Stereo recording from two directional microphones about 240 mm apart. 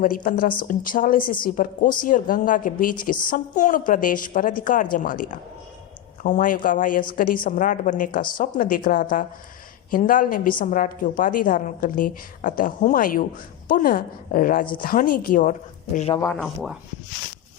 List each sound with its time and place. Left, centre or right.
0.0 s a woman's voice: left
16.0 s speech: left
16.2 s speech: centre